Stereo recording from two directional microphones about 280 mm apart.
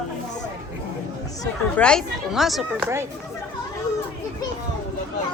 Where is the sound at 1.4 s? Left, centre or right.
Centre.